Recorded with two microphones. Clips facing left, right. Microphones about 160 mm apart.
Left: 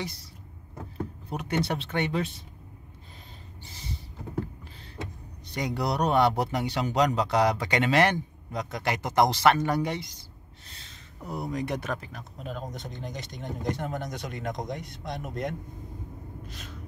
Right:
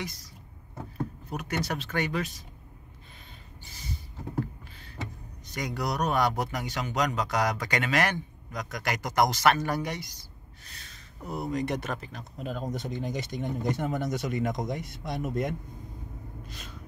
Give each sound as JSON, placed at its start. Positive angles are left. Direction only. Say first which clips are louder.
{"t": 0.0, "sound": "speech", "louder": "left 2 dB", "side_deg": 30}
{"t": 1.3, "sound": "speech", "louder": "left 4 dB", "side_deg": 30}
{"t": 3.7, "sound": "a sound", "louder": "even", "side_deg": 30}
{"t": 5.5, "sound": "speech", "louder": "left 3 dB", "side_deg": 30}
{"t": 11.4, "sound": "speech", "louder": "right 1 dB", "side_deg": 0}
{"t": 16.4, "sound": "a sound", "louder": "left 2 dB", "side_deg": 0}